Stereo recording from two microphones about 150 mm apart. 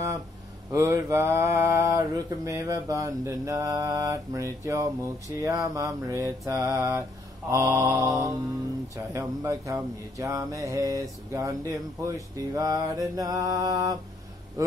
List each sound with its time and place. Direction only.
0.7 s mantra: 20° right (ahead or behind)